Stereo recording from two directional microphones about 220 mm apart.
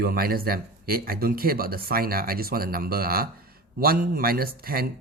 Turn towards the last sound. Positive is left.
turn(degrees=-40)  # may be behind; listen again after turning